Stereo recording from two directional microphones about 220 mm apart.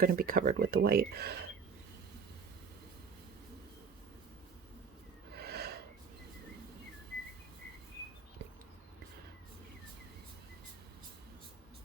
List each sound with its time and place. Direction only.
0.0 s speech: 40° right (ahead or behind)
5.3 s snort: 45° right (ahead or behind)